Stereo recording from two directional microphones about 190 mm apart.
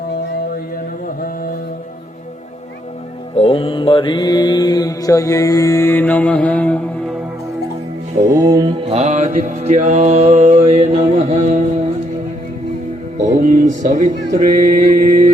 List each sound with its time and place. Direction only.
3.3 s mantra: 30° left (ahead or behind); by 7.2 s 5° left (ahead or behind)
8.4 s music: 20° right (ahead or behind); by 11.6 s 40° right (ahead or behind)
13.1 s music: 45° right (ahead or behind)
14.3 s mantra: 45° right (ahead or behind)